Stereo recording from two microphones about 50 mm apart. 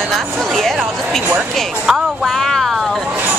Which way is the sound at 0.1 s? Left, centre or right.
Centre.